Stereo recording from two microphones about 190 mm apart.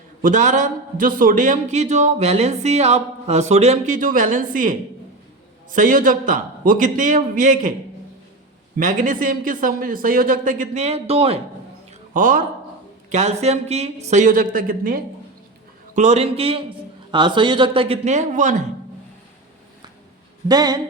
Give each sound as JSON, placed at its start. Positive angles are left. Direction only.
{"t": 0.2, "sound": "a man's voice", "side_deg": -40}
{"t": 8.8, "sound": "speech", "side_deg": -40}
{"t": 12.1, "sound": "a man's voice", "side_deg": -45}
{"t": 16.0, "sound": "a man's voice", "side_deg": -35}
{"t": 20.5, "sound": "speech", "side_deg": -20}